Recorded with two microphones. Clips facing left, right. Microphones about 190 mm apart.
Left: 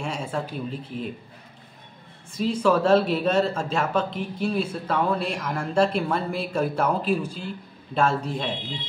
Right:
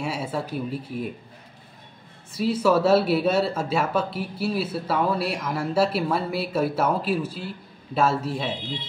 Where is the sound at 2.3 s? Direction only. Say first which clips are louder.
Right 1 dB; 5° right (ahead or behind).